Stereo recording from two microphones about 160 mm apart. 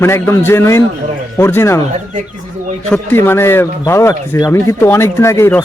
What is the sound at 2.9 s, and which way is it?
Speech, 15° left (ahead or behind).